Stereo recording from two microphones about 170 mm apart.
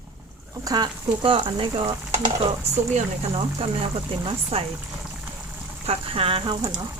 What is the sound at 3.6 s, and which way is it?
Speech, 35° right (ahead or behind).